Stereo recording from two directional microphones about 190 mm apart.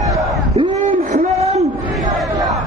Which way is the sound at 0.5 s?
30° right (ahead or behind).